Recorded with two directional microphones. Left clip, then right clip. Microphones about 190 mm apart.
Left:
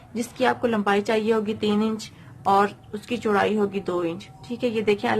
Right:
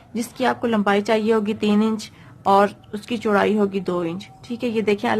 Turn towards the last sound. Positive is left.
turn(degrees=-40)  # may be behind; listen again after turning